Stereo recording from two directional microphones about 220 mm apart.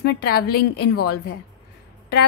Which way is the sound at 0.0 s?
45° left (ahead or behind).